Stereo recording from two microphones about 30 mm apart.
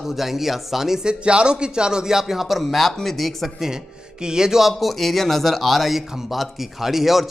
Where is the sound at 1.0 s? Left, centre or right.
Right; by 2.6 s centre.